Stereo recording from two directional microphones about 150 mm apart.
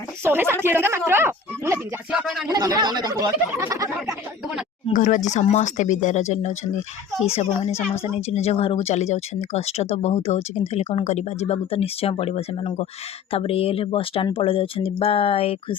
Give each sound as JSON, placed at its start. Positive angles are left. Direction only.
{"t": 0.3, "sound": "speech", "side_deg": -15}
{"t": 2.1, "sound": "speech", "side_deg": 0}
{"t": 2.5, "sound": "speech", "side_deg": -25}
{"t": 4.9, "sound": "speech", "side_deg": 60}
{"t": 5.3, "sound": "speech", "side_deg": 50}